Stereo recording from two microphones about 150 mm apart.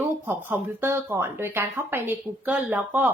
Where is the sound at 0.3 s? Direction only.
15° right (ahead or behind).